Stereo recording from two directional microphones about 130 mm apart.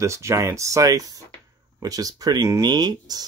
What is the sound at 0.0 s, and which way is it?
Speech, 25° right (ahead or behind).